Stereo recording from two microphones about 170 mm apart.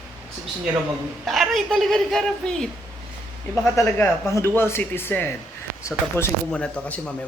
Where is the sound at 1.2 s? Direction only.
Centre (ahead or behind).